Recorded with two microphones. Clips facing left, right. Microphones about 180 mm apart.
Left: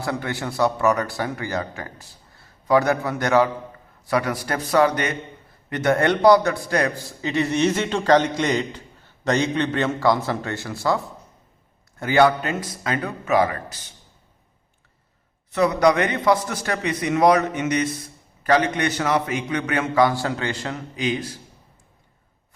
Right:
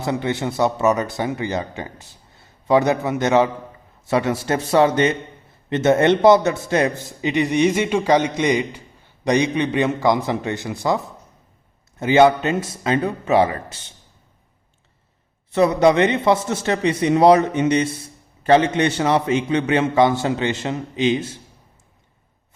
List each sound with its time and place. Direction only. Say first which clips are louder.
0.0 s a man's voice: right 4 dB; 20° right (ahead or behind)
15.5 s a man's voice: right 3 dB; 25° right (ahead or behind)